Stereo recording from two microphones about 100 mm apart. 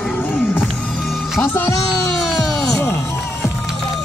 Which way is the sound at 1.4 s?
25° left (ahead or behind).